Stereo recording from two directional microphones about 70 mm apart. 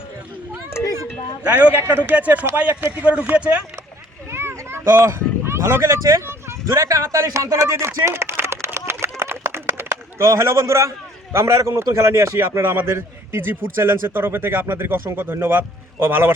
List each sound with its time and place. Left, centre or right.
1.5 s a man's voice: right
4.3 s a sound: right
5.0 s speech: right
6.7 s speech: right
8.9 s a sound: right
12.6 s a man's voice: right